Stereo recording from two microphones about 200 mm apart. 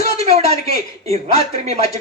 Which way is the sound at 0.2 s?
30° right (ahead or behind).